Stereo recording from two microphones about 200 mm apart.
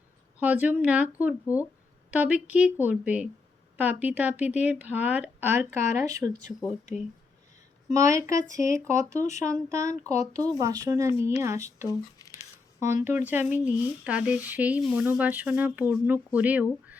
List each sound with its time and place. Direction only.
0.3 s speech: 10° right (ahead or behind)
7.9 s speech: 15° right (ahead or behind)
9.1 s speech: 35° left (ahead or behind)
9.4 s speech: 15° right (ahead or behind)
11.9 s speech: 15° left (ahead or behind)
12.8 s speech: 10° right (ahead or behind)